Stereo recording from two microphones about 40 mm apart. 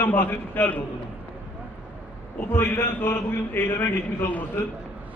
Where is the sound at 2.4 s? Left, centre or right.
Left.